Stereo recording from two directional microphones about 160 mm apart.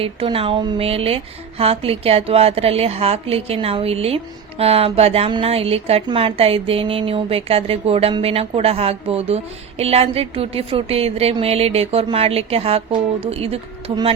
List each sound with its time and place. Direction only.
0.0 s speech: 35° right (ahead or behind)